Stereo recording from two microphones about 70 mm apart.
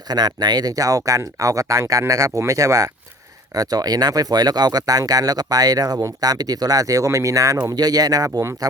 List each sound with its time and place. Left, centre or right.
0.1 s speech: right
7.8 s speech: right